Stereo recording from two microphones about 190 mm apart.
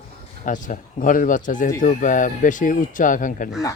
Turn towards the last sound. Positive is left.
turn(degrees=45)  # may be behind; listen again after turning